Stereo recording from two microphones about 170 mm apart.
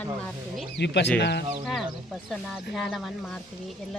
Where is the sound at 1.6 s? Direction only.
Centre (ahead or behind).